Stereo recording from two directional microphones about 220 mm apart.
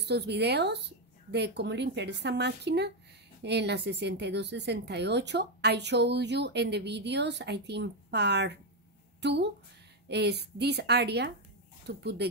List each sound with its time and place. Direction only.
0.0 s speech: 50° right (ahead or behind)